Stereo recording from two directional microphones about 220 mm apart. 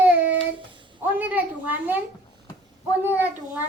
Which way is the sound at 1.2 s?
5° right (ahead or behind).